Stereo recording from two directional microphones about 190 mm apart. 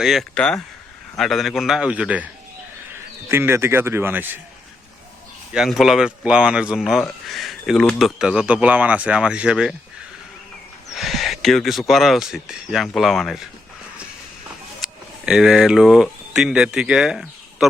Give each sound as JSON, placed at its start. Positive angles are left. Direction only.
{"t": 0.0, "sound": "speech", "side_deg": 0}
{"t": 5.5, "sound": "speech", "side_deg": 0}
{"t": 10.9, "sound": "speech", "side_deg": 0}
{"t": 14.8, "sound": "a sound", "side_deg": -5}
{"t": 15.3, "sound": "speech", "side_deg": 0}